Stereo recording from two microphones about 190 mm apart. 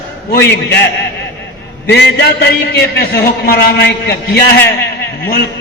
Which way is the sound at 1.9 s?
60° left (ahead or behind).